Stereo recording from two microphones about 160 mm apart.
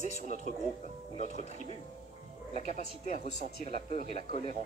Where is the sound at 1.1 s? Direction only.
45° left (ahead or behind).